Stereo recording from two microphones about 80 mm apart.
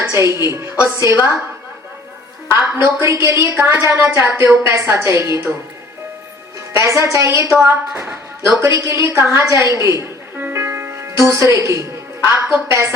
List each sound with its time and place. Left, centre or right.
0.1 s a woman's voice: right
2.5 s a woman's voice: right
6.7 s a woman's voice: right
10.3 s music: right